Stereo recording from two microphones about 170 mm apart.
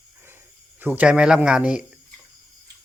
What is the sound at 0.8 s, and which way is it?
Speech, 10° right (ahead or behind).